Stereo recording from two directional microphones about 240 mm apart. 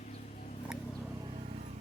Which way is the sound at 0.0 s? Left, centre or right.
Left.